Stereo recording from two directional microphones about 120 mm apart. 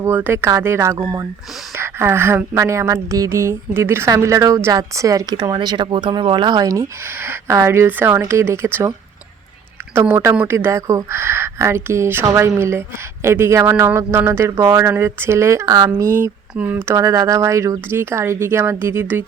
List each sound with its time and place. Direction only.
0.0 s speech: 15° right (ahead or behind)
9.9 s speech: 20° right (ahead or behind)